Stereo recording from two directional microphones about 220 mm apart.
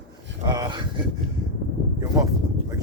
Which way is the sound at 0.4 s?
20° right (ahead or behind).